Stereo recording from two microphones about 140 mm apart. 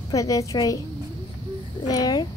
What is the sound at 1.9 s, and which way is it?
Speech, 25° left (ahead or behind).